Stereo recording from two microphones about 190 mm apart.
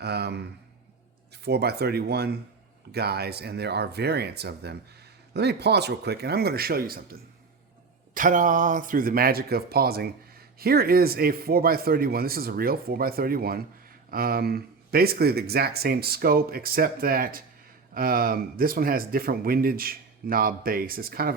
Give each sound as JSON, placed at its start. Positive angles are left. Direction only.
{"t": 0.0, "sound": "speech", "side_deg": -60}
{"t": 1.5, "sound": "speech", "side_deg": -60}